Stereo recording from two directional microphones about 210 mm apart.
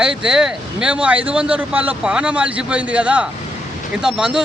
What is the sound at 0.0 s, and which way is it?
Speech, 5° right (ahead or behind).